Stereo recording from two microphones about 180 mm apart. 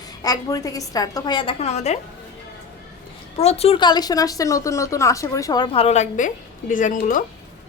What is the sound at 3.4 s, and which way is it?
A woman's voice, 35° left (ahead or behind).